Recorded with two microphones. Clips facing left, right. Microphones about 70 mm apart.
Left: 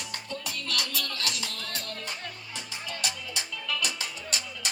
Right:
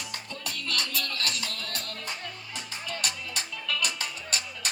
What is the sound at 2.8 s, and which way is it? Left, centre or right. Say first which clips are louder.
Music: right 1 dB; right.